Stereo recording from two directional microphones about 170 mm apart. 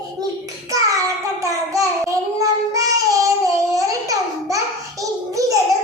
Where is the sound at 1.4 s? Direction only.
20° right (ahead or behind).